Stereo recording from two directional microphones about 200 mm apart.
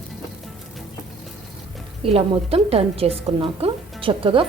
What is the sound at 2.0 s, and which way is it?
A woman's voice, 30° right (ahead or behind).